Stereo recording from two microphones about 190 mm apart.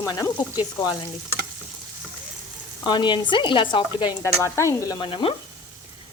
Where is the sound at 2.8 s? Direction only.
25° left (ahead or behind).